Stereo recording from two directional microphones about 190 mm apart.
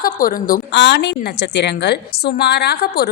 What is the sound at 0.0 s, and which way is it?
A woman's voice, 50° left (ahead or behind).